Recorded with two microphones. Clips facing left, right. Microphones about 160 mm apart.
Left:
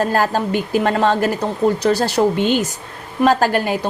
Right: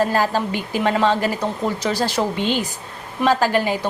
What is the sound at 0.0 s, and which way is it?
A woman's voice, 50° left (ahead or behind).